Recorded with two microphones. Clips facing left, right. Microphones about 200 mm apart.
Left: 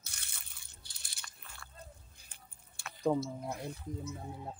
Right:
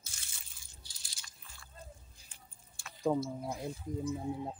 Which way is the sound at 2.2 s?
65° left (ahead or behind).